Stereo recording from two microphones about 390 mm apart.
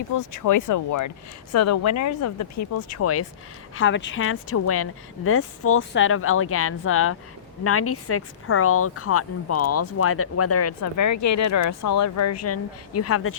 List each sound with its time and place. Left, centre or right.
0.1 s speech: left